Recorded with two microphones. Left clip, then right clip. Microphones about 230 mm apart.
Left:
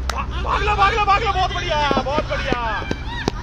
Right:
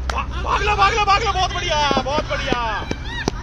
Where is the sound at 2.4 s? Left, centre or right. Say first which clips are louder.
Right 1 dB; right.